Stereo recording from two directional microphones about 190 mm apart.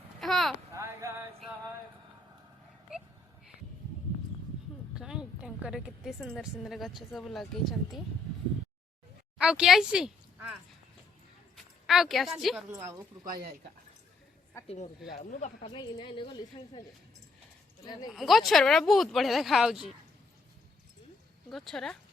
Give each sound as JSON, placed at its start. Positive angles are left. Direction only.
{"t": 0.2, "sound": "a sound", "side_deg": 0}
{"t": 0.7, "sound": "a sound", "side_deg": -15}
{"t": 4.9, "sound": "a woman's voice", "side_deg": -5}
{"t": 9.4, "sound": "speech", "side_deg": -5}
{"t": 13.3, "sound": "speech", "side_deg": -50}
{"t": 15.2, "sound": "speech", "side_deg": 40}
{"t": 15.7, "sound": "a woman's voice", "side_deg": 25}
{"t": 18.1, "sound": "speech", "side_deg": 0}
{"t": 21.5, "sound": "speech", "side_deg": 0}